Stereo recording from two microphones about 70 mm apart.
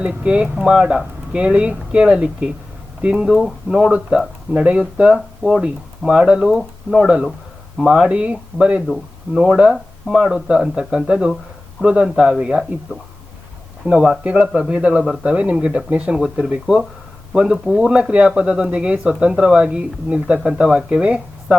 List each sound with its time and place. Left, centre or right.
0.0 s speech: centre
6.6 s speech: centre
9.3 s speech: centre
13.8 s speech: centre